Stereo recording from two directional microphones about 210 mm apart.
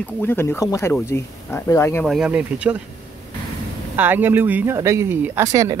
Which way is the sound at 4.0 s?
10° right (ahead or behind).